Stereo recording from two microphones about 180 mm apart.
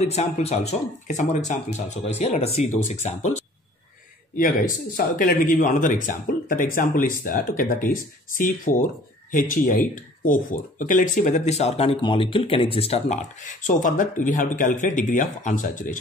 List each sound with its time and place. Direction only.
0.0 s speech: 35° left (ahead or behind)
4.9 s speech: 50° left (ahead or behind)